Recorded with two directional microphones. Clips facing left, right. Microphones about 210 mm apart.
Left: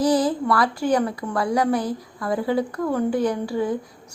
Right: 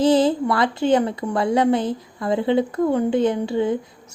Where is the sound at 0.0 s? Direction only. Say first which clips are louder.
Right 3 dB; 25° right (ahead or behind).